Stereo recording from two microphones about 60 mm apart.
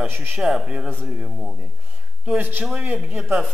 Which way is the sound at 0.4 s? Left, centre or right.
Centre.